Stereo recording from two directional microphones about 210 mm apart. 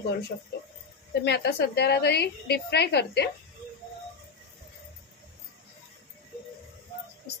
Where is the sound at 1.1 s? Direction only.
55° left (ahead or behind).